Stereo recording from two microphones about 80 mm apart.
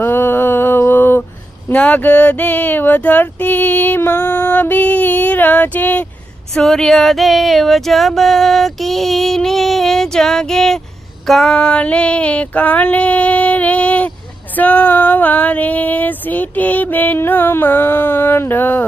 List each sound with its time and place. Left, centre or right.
0.0 s mantra: left
1.7 s speech: centre
6.5 s female singing: centre
11.5 s female singing: centre
14.5 s speech: centre